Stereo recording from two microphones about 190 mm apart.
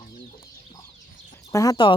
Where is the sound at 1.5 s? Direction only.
20° left (ahead or behind).